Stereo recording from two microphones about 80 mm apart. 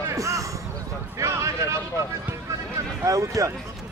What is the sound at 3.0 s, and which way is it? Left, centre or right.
Speech, right.